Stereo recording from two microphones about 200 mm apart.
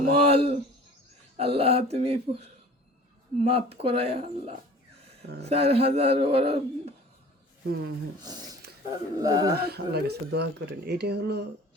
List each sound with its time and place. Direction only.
0.0 s speech: 30° right (ahead or behind)
7.6 s speech: 50° right (ahead or behind)
8.2 s speech: 20° right (ahead or behind)
9.6 s speech: 55° right (ahead or behind)